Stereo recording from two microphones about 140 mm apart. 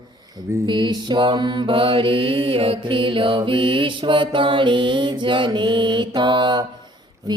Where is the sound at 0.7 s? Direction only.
35° right (ahead or behind).